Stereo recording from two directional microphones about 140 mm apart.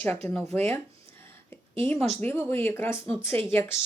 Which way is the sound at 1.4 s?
15° left (ahead or behind).